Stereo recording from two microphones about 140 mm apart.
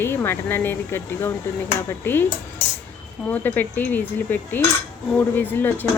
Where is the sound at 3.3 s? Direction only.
10° left (ahead or behind).